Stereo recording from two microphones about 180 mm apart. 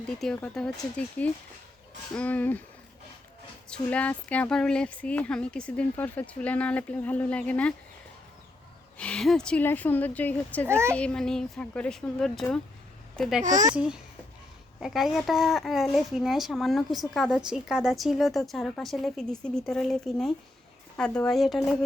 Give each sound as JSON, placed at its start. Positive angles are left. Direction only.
{"t": 0.3, "sound": "a child's voice", "side_deg": 5}
{"t": 3.7, "sound": "speech", "side_deg": 5}
{"t": 9.0, "sound": "speech", "side_deg": 5}
{"t": 10.7, "sound": "speech", "side_deg": -15}
{"t": 10.9, "sound": "a child's voice", "side_deg": 5}
{"t": 13.4, "sound": "speech", "side_deg": -45}
{"t": 13.7, "sound": "a child's voice", "side_deg": -5}